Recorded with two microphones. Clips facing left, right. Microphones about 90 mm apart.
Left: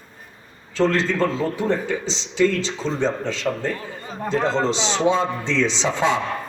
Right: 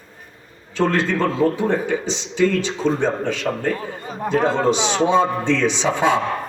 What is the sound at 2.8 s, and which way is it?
Speech, 55° right (ahead or behind).